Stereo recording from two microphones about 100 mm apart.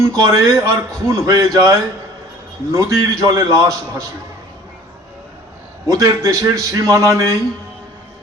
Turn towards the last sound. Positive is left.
turn(degrees=-30)  # may be behind; listen again after turning